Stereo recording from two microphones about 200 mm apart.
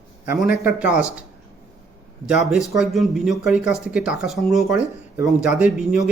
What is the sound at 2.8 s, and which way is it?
Speech, centre (ahead or behind).